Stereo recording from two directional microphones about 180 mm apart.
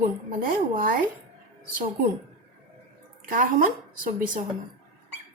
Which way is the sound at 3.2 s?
50° right (ahead or behind).